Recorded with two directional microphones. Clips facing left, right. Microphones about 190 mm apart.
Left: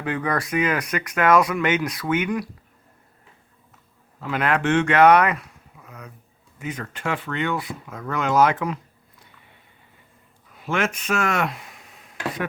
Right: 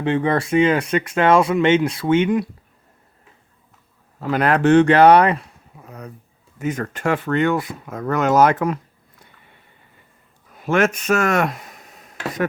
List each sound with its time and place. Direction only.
0.0 s speech: 25° right (ahead or behind)
4.2 s speech: 40° right (ahead or behind)
6.6 s speech: 45° right (ahead or behind)
10.5 s a sound: 45° right (ahead or behind)